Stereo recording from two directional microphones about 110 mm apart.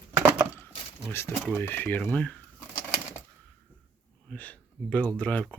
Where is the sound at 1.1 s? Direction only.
20° left (ahead or behind).